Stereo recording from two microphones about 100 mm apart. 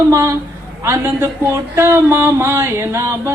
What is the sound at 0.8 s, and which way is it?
Speech, 25° right (ahead or behind).